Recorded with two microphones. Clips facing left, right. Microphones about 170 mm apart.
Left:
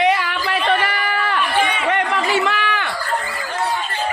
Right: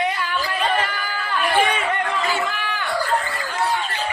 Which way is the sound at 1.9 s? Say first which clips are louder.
Left 4 dB; 80° left.